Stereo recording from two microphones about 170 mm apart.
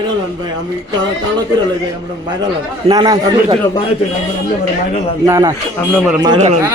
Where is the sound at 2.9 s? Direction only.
25° right (ahead or behind).